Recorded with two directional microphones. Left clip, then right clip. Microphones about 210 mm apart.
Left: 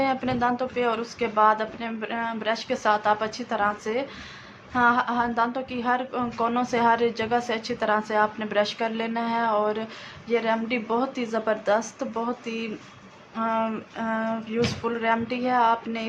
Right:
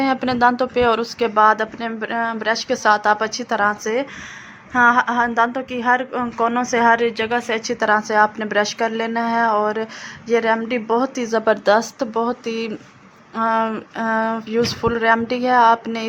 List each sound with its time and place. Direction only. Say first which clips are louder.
0.0 s a woman's voice: right 7 dB; 40° right (ahead or behind)
4.7 s a woman's voice: right 7 dB; 25° right (ahead or behind)
7.0 s a woman's voice: right 4 dB; 10° right (ahead or behind)
7.7 s a woman's voice: right 7 dB; 30° right (ahead or behind)